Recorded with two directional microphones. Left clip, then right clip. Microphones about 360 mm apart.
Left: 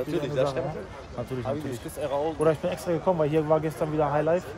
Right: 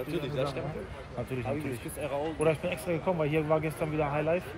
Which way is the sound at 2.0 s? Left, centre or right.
Centre.